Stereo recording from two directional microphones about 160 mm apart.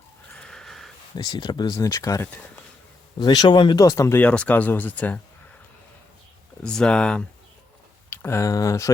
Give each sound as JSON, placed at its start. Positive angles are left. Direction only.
{"t": 0.4, "sound": "a sound", "side_deg": 5}
{"t": 1.1, "sound": "speech", "side_deg": 30}
{"t": 6.6, "sound": "speech", "side_deg": 5}